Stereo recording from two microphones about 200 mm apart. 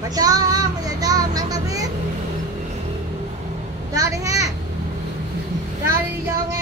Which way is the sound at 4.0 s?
15° right (ahead or behind).